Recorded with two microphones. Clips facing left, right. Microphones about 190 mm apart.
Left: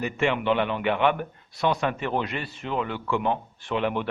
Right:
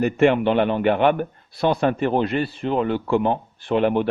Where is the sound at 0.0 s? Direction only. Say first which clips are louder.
Right 8 dB; 45° right (ahead or behind).